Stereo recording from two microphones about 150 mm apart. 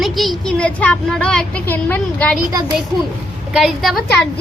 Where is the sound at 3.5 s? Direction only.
Centre (ahead or behind).